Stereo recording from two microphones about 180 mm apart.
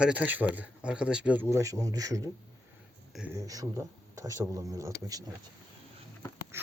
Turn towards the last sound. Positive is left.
turn(degrees=-15)  # may be behind; listen again after turning